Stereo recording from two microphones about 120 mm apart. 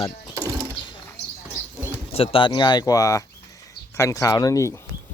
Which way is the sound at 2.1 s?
50° left (ahead or behind).